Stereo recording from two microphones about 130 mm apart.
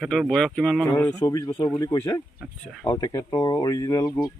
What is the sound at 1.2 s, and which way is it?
Speech, 30° left (ahead or behind).